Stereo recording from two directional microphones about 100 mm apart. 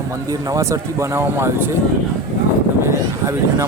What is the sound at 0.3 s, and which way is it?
A man's voice, 35° right (ahead or behind).